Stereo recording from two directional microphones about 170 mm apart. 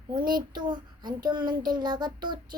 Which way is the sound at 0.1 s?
25° right (ahead or behind).